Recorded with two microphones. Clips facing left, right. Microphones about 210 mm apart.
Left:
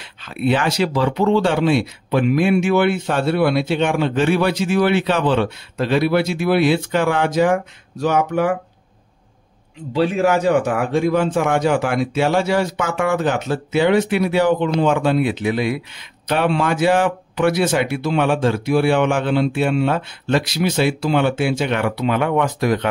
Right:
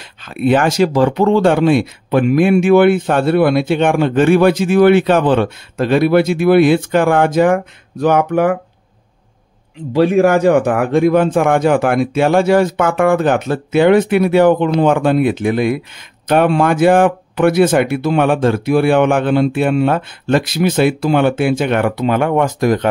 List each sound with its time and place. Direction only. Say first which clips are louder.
0.2 s speech: right 5 dB; 45° right (ahead or behind)
9.9 s speech: right 6 dB; 50° right (ahead or behind)